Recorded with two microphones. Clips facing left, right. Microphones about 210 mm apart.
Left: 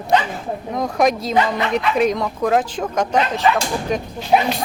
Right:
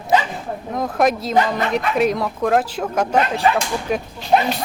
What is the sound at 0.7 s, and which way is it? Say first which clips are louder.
A woman's voice: even; centre (ahead or behind).